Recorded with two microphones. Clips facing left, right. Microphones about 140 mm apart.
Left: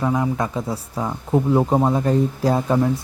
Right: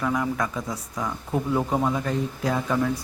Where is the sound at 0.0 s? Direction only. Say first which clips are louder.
Left 4 dB; 25° left (ahead or behind).